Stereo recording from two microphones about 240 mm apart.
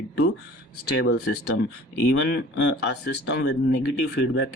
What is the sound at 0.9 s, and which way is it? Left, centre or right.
Speech, left.